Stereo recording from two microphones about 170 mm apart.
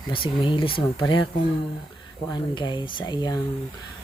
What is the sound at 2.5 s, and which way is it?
Speech, 25° left (ahead or behind).